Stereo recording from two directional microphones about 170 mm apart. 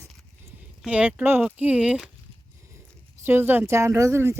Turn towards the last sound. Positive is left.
turn(degrees=-15)  # may be behind; listen again after turning